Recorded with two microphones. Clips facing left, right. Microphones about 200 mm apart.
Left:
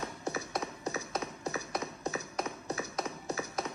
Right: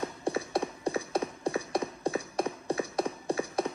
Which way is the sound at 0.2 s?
30° right (ahead or behind).